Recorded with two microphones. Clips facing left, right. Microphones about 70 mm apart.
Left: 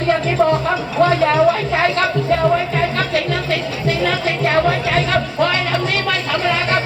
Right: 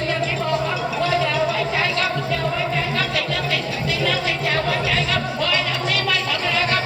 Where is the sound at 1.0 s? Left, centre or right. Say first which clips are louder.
Left 8 dB; left.